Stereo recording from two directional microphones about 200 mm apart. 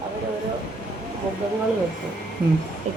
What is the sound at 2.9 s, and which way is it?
Speech, 35° right (ahead or behind).